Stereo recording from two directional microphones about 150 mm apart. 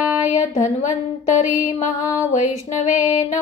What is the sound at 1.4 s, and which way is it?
Mantra, 55° left (ahead or behind).